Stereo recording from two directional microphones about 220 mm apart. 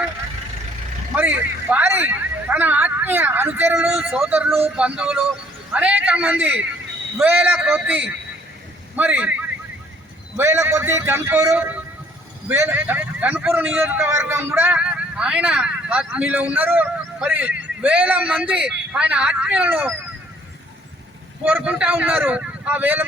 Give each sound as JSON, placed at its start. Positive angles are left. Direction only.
{"t": 1.1, "sound": "a man's voice", "side_deg": -5}
{"t": 4.6, "sound": "music", "side_deg": -5}
{"t": 7.2, "sound": "a man's voice", "side_deg": -10}
{"t": 21.4, "sound": "a man's voice", "side_deg": -5}